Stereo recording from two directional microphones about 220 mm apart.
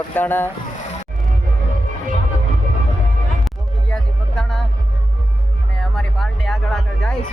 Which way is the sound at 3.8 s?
5° left (ahead or behind).